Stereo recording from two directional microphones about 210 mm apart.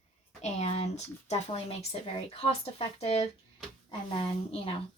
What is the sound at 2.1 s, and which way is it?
Speech, 25° left (ahead or behind).